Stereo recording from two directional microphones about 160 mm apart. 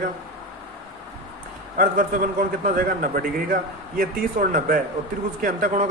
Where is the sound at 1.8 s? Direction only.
55° right (ahead or behind).